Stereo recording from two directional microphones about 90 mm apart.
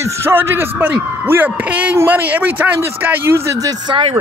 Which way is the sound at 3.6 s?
45° right (ahead or behind).